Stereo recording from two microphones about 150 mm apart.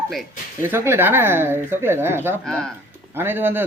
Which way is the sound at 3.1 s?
15° right (ahead or behind).